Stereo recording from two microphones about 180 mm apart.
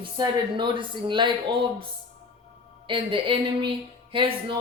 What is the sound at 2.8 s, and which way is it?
Speech, 30° right (ahead or behind).